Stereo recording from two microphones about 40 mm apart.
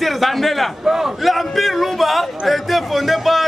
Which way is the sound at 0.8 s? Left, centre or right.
Centre.